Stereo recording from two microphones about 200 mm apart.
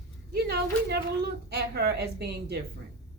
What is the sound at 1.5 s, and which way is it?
A woman's voice, 55° right (ahead or behind).